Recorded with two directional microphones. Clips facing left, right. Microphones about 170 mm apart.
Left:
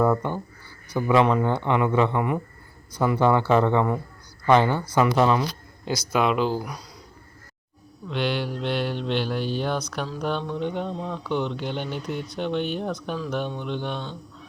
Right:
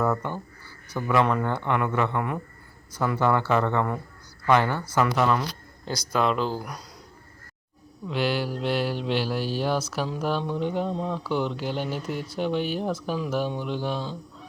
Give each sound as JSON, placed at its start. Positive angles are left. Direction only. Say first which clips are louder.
{"t": 0.0, "sound": "speech", "louder": "left 4 dB", "side_deg": 15}
{"t": 8.0, "sound": "speech", "louder": "even", "side_deg": -5}